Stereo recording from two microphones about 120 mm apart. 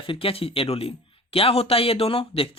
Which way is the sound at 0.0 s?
50° left (ahead or behind).